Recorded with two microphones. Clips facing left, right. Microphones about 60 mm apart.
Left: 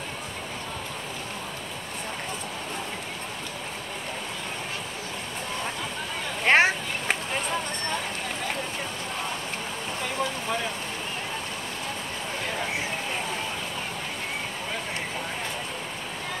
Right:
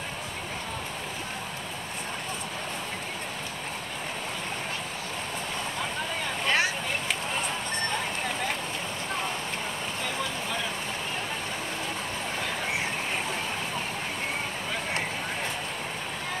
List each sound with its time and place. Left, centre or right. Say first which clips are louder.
6.4 s vehicle: left 7 dB; left